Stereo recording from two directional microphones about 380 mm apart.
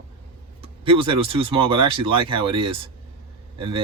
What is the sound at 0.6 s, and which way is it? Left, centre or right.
Speech, centre.